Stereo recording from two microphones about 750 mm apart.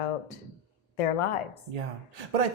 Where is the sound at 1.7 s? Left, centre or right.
Right.